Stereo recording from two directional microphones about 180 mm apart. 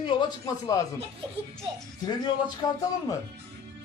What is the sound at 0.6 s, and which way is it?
Speech, 20° left (ahead or behind).